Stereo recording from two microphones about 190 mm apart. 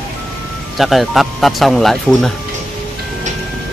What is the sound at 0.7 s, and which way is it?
Speech, centre (ahead or behind).